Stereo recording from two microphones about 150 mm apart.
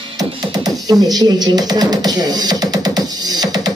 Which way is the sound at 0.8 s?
25° right (ahead or behind).